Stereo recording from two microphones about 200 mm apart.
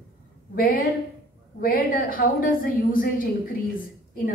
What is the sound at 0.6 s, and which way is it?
A woman's voice, 45° left (ahead or behind).